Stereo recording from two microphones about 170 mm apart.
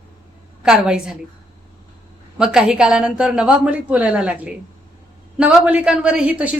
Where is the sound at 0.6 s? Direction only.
5° right (ahead or behind).